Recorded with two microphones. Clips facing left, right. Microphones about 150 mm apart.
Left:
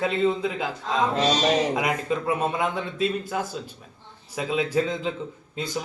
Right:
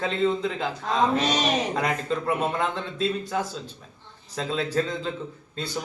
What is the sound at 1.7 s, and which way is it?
A man's voice, 10° left (ahead or behind).